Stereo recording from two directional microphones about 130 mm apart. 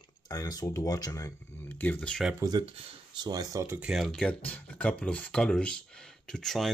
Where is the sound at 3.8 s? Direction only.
5° right (ahead or behind).